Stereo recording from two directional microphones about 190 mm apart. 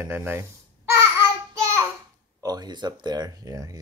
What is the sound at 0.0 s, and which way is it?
Speech, 10° right (ahead or behind).